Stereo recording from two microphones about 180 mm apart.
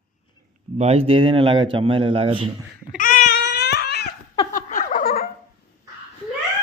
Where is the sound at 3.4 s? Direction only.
65° left (ahead or behind).